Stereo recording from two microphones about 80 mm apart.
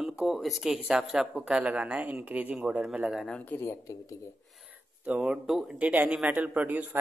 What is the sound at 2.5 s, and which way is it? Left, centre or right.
Speech, centre.